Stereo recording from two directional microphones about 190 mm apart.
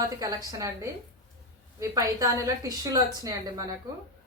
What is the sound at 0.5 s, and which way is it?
A woman's voice, 15° right (ahead or behind).